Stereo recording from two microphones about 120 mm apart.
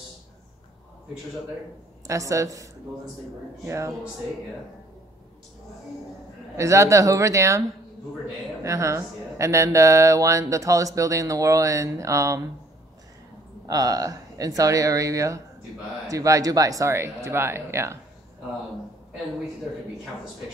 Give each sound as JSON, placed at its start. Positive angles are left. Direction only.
{"t": 2.0, "sound": "speech", "side_deg": -25}
{"t": 6.5, "sound": "speech", "side_deg": -25}
{"t": 8.6, "sound": "speech", "side_deg": -25}
{"t": 13.7, "sound": "speech", "side_deg": -30}